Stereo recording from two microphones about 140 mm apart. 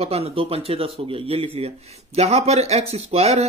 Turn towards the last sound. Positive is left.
turn(degrees=-50)  # may be behind; listen again after turning